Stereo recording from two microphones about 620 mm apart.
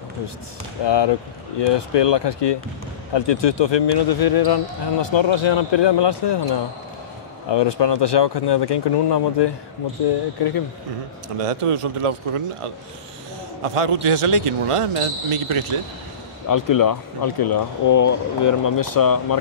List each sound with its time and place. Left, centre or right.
0.8 s speech: left
5.0 s speech: left
11.3 s speech: right
13.6 s speech: right
16.4 s speech: left